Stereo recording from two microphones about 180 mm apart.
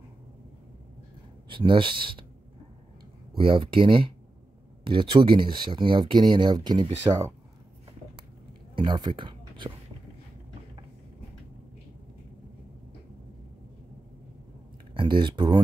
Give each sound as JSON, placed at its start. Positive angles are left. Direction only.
{"t": 1.5, "sound": "speech", "side_deg": -25}
{"t": 3.3, "sound": "speech", "side_deg": -30}
{"t": 8.7, "sound": "speech", "side_deg": -25}
{"t": 15.0, "sound": "speech", "side_deg": -25}